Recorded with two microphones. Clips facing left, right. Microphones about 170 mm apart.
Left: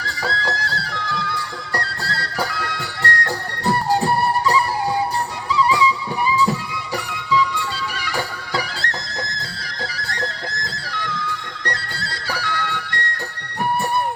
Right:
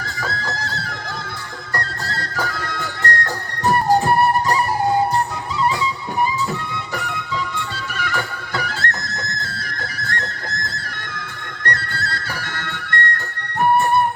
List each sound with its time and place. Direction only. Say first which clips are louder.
0.0 s music: left 2 dB; 45° right (ahead or behind)